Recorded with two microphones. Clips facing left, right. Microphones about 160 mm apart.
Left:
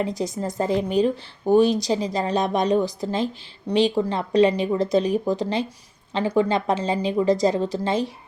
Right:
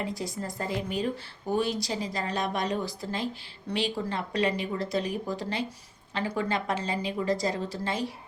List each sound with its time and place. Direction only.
0.0 s a woman's voice: 20° left (ahead or behind)